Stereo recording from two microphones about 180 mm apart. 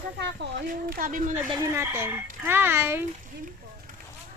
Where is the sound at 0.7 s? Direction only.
50° right (ahead or behind).